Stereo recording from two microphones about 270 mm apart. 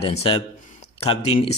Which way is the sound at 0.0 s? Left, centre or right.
Left.